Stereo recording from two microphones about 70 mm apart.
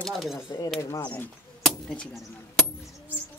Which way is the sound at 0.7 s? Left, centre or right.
Left.